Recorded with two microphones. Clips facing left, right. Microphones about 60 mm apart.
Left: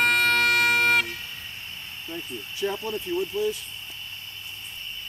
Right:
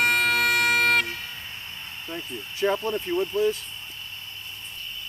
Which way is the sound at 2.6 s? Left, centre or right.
Right.